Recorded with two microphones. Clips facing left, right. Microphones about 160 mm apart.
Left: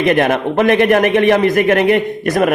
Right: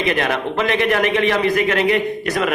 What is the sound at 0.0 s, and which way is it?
A man's voice, 55° left (ahead or behind).